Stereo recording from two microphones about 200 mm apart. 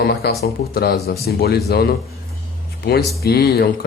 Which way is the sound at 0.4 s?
50° left (ahead or behind).